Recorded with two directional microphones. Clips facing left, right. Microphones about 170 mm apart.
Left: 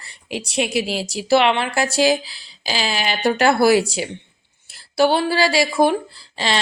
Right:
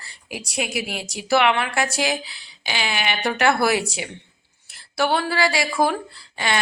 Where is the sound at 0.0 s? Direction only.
25° left (ahead or behind).